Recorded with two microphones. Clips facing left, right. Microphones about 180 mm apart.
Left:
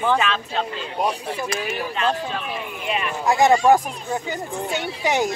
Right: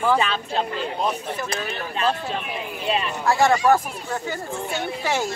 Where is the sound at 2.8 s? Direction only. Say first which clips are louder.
Right 2 dB; 30° right (ahead or behind).